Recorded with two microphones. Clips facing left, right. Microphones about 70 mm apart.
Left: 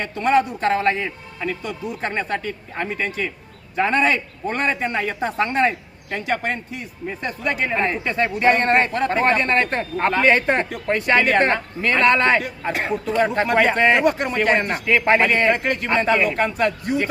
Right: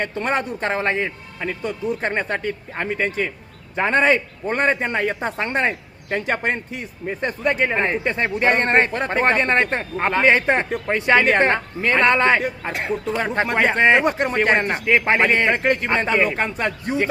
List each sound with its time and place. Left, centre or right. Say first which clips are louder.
0.0 s a woman's voice: left 4 dB; right
12.8 s speech: left 2 dB; centre
13.3 s speech: left 1 dB; right